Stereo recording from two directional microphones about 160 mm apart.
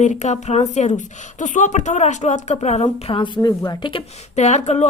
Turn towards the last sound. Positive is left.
turn(degrees=45)  # may be behind; listen again after turning